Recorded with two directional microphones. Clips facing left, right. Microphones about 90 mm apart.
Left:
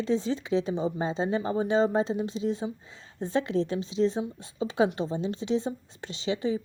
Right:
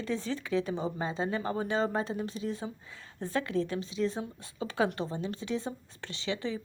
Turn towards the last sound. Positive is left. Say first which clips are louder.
# left 6 dB
turn(degrees=20)  # may be behind; listen again after turning